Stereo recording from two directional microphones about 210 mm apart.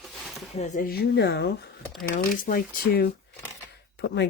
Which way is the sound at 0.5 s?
35° left (ahead or behind).